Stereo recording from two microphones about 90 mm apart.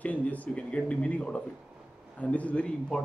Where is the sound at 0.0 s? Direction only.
15° left (ahead or behind).